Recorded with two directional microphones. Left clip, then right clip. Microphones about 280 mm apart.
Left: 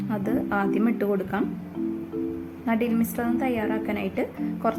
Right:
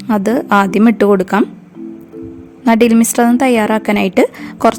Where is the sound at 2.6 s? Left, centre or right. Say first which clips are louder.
Right 15 dB; right.